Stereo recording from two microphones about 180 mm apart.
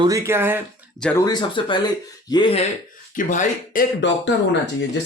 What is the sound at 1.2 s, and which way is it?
Speech, 25° left (ahead or behind).